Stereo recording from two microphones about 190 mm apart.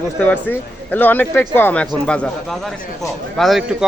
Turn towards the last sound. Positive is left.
turn(degrees=0)  # may be behind; listen again after turning